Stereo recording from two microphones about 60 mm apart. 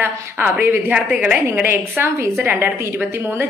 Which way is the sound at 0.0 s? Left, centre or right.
Right.